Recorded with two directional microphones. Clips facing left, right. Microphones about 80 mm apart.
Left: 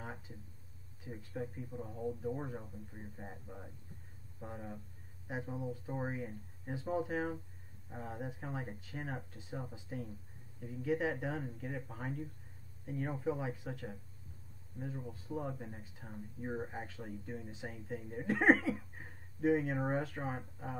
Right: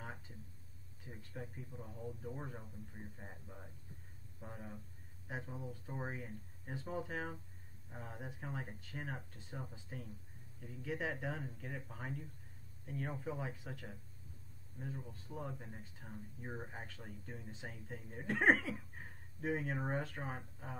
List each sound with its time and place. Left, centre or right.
1.0 s speech: centre
1.7 s speech: centre